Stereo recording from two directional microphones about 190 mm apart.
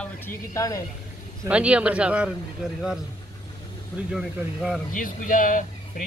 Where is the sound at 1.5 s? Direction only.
5° right (ahead or behind).